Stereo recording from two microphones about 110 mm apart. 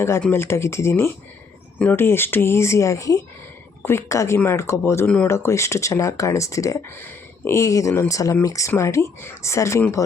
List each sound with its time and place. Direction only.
0.2 s speech: 20° left (ahead or behind)